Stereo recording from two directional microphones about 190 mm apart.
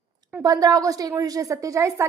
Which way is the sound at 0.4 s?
20° right (ahead or behind).